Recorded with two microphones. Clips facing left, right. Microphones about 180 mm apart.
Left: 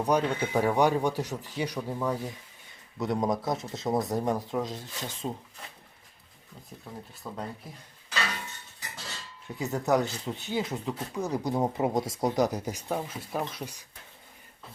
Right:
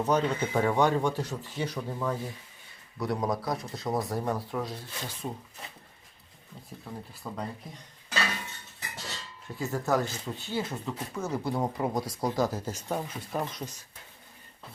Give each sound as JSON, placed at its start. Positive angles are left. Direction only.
{"t": 0.0, "sound": "speech", "side_deg": 10}
{"t": 6.9, "sound": "speech", "side_deg": 0}
{"t": 9.6, "sound": "speech", "side_deg": 20}
{"t": 12.9, "sound": "speech", "side_deg": 5}